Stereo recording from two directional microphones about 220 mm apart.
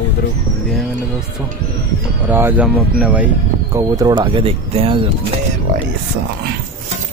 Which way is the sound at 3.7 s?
15° right (ahead or behind).